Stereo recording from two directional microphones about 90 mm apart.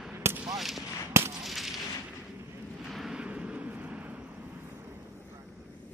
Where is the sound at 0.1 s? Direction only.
25° right (ahead or behind).